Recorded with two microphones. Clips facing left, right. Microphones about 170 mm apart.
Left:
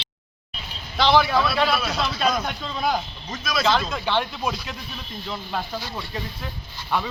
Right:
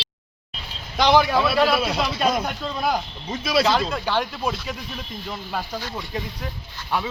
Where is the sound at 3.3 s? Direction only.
30° right (ahead or behind).